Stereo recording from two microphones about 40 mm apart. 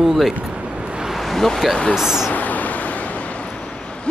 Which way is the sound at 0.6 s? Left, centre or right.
Right.